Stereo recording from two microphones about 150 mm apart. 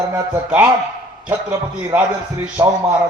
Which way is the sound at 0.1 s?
10° right (ahead or behind).